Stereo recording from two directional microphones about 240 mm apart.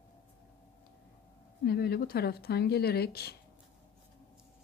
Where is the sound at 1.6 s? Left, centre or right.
Left.